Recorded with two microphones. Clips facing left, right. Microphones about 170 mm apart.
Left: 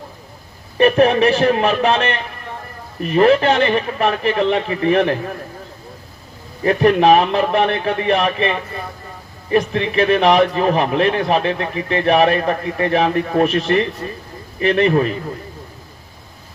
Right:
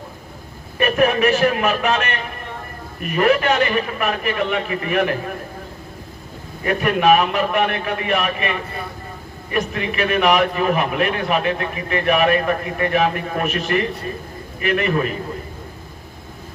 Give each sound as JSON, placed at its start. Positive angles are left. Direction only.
{"t": 0.8, "sound": "a man's voice", "side_deg": 30}
{"t": 6.6, "sound": "a man's voice", "side_deg": 30}